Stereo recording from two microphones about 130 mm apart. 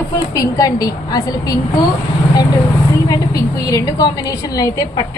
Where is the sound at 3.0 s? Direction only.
30° left (ahead or behind).